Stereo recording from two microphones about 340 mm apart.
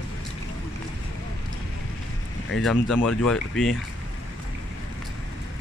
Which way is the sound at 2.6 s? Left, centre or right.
Centre.